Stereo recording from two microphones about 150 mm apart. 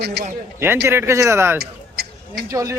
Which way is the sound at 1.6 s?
90° right.